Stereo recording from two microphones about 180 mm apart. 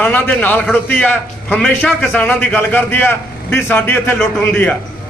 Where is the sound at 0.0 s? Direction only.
10° left (ahead or behind).